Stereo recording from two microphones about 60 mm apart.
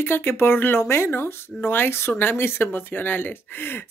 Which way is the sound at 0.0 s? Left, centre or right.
Left.